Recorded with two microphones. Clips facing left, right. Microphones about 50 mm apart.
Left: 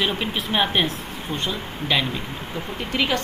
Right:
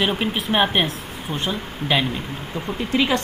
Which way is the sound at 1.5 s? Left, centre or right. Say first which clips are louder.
Right 3 dB; centre.